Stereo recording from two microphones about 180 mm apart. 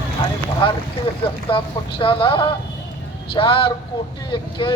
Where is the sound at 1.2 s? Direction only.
30° left (ahead or behind).